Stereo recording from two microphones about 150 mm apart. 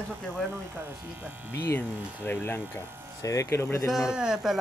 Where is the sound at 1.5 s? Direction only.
15° left (ahead or behind).